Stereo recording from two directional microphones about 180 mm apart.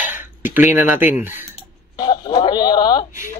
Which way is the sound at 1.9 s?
25° left (ahead or behind).